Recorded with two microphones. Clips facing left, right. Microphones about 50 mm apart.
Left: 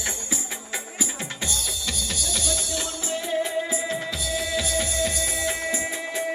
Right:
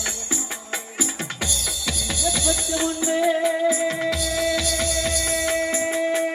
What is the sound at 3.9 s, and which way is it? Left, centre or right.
Music, right.